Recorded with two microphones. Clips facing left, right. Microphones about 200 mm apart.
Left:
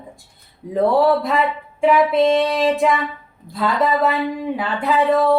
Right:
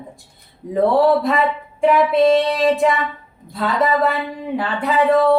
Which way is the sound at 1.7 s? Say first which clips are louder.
Even; centre (ahead or behind).